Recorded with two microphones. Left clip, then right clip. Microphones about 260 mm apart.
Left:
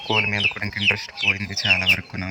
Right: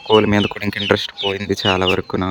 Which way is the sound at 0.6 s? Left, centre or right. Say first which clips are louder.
Right 3 dB; centre.